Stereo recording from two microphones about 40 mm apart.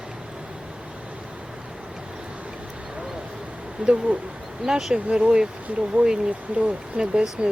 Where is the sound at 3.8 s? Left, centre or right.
Right.